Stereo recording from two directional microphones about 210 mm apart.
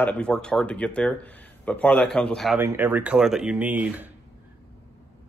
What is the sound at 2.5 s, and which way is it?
Speech, 10° right (ahead or behind).